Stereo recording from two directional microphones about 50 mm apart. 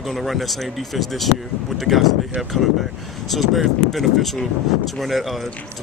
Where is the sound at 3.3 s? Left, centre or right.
Centre.